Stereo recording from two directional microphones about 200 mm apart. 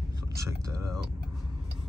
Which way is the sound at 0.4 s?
15° right (ahead or behind).